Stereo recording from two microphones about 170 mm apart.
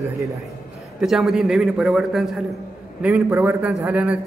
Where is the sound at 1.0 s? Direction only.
Centre (ahead or behind).